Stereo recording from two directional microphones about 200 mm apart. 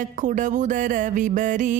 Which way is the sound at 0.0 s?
40° right (ahead or behind).